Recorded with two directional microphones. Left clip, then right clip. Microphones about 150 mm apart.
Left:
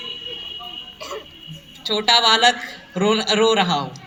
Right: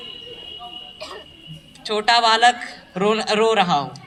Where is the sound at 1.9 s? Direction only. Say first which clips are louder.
Left 1 dB; 20° right (ahead or behind).